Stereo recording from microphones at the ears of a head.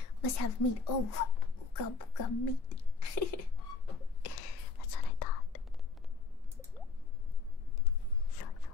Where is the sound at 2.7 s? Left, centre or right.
Left.